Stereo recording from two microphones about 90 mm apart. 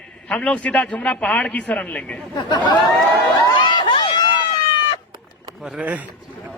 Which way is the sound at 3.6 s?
60° left (ahead or behind).